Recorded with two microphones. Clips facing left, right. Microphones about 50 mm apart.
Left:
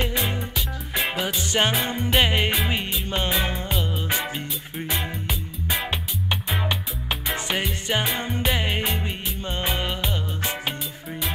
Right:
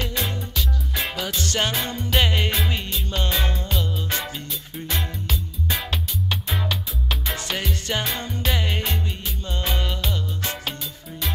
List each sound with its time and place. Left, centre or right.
0.0 s music: left